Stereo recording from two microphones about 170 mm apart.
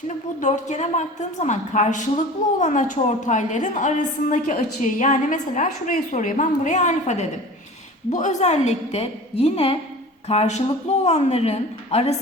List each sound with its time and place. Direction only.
0.3 s a woman's voice: 45° left (ahead or behind)